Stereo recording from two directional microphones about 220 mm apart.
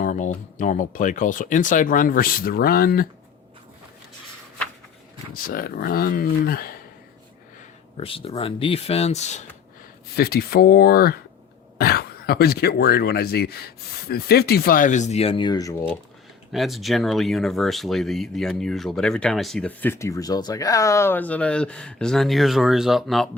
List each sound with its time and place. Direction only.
0.0 s speech: 35° left (ahead or behind)
5.3 s speech: 40° left (ahead or behind)
7.9 s speech: 25° left (ahead or behind)
10.2 s speech: 45° left (ahead or behind); by 15.7 s 20° left (ahead or behind)
16.5 s speech: centre (ahead or behind)